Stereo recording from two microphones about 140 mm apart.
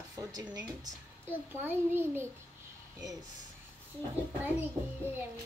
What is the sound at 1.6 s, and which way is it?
Speech, 15° right (ahead or behind).